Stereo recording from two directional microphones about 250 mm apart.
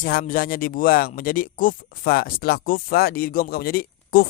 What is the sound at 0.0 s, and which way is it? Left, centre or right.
Speech, left.